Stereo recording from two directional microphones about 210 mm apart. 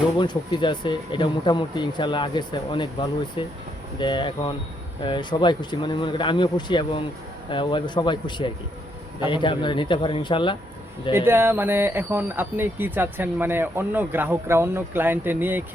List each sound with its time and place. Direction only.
0.2 s speech: 20° left (ahead or behind)
11.3 s speech: 10° right (ahead or behind)